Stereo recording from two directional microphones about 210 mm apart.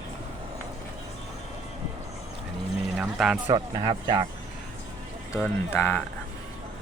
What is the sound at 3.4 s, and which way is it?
Speech, 20° right (ahead or behind).